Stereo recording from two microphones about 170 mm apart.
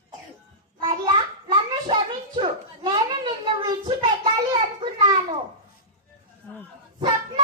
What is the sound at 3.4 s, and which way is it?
Child singing, 30° right (ahead or behind).